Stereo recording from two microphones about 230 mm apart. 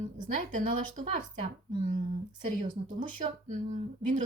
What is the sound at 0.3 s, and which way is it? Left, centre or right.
Speech, right.